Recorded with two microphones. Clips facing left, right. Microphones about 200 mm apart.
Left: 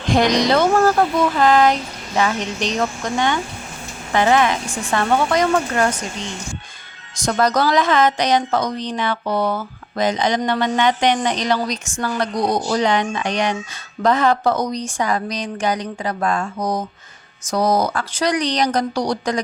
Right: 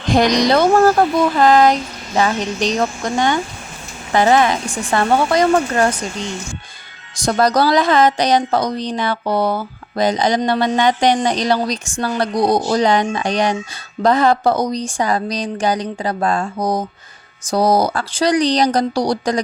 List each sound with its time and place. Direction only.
0.2 s speech: 40° right (ahead or behind)
4.1 s speech: 35° right (ahead or behind)
7.3 s speech: 35° right (ahead or behind)